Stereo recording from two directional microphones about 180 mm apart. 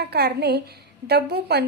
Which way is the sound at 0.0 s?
60° right (ahead or behind).